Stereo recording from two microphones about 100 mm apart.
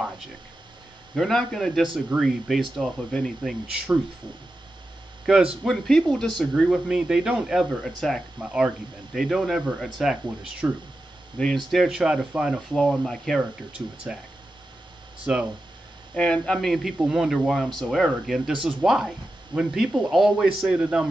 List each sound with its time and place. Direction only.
1.1 s speech: 5° left (ahead or behind)
5.2 s speech: 10° right (ahead or behind)
6.7 s speech: 5° right (ahead or behind)
8.4 s speech: 15° right (ahead or behind)
9.1 s speech: 5° left (ahead or behind)
10.6 s speech: 20° right (ahead or behind)
11.3 s speech: 5° left (ahead or behind)
12.7 s speech: 5° left (ahead or behind)
13.4 s speech: 10° right (ahead or behind)
15.3 s speech: 15° right (ahead or behind)
16.2 s speech: 10° left (ahead or behind); by 21.1 s 5° right (ahead or behind)